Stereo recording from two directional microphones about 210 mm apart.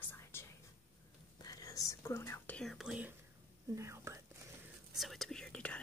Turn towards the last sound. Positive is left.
turn(degrees=5)  # may be behind; listen again after turning